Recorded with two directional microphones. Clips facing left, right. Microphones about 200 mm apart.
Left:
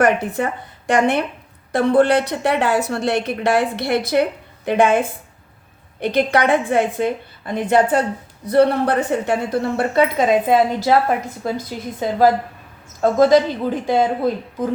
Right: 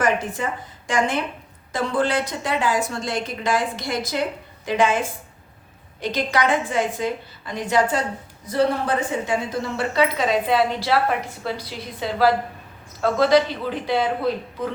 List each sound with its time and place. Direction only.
0.0 s a woman's voice: 65° left (ahead or behind); by 14.7 s 45° left (ahead or behind)